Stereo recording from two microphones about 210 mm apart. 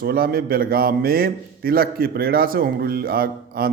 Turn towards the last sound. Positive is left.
turn(degrees=-45)  # may be behind; listen again after turning